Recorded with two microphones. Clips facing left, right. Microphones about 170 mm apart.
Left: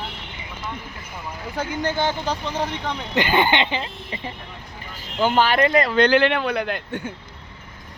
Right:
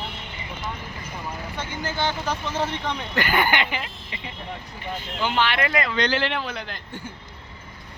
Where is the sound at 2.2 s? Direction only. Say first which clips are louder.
Left 1 dB; 15° left (ahead or behind).